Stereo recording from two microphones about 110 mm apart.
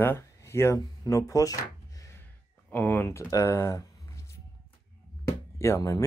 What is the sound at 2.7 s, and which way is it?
Speech, 20° left (ahead or behind).